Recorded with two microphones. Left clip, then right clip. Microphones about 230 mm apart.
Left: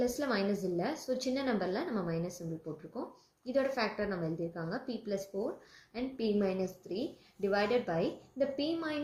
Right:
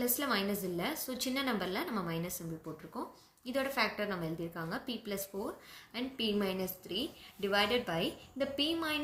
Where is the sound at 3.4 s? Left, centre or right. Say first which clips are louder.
Left 1 dB; right.